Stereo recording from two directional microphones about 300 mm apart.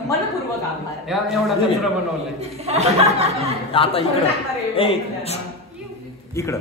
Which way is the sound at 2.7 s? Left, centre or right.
Right.